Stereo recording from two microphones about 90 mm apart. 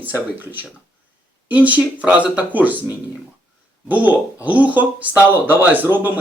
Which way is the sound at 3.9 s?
20° right (ahead or behind).